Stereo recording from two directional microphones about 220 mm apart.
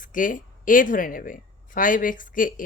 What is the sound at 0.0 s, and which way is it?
Speech, 40° left (ahead or behind).